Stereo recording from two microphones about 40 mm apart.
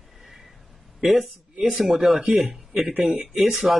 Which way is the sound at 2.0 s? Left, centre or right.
Centre.